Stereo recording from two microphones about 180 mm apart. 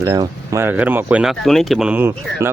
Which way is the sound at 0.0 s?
20° right (ahead or behind).